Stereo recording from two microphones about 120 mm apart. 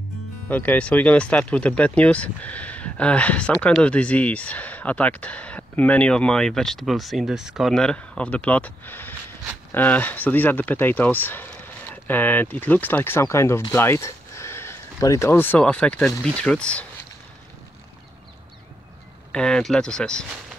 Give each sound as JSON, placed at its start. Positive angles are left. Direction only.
{"t": 0.5, "sound": "speech", "side_deg": 15}
{"t": 19.3, "sound": "speech", "side_deg": 5}